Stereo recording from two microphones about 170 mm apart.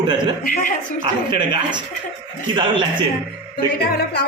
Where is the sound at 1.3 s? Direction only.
25° right (ahead or behind).